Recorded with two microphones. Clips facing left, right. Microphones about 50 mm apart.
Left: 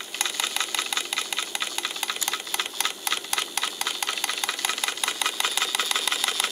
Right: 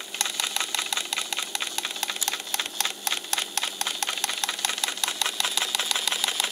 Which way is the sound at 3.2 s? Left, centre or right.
Centre.